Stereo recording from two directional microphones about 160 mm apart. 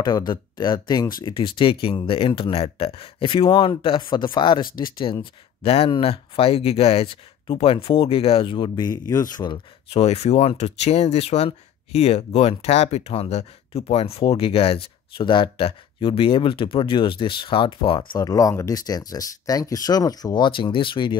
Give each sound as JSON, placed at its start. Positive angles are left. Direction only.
{"t": 0.0, "sound": "speech", "side_deg": 25}
{"t": 18.2, "sound": "speech", "side_deg": 20}